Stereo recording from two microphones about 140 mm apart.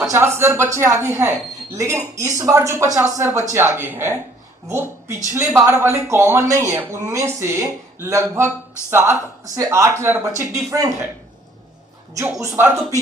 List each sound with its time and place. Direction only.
0.1 s speech: 15° right (ahead or behind)
5.3 s a woman's voice: 20° right (ahead or behind)
12.1 s speech: 20° right (ahead or behind)